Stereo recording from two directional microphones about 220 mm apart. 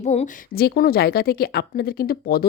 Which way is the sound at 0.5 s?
45° left (ahead or behind).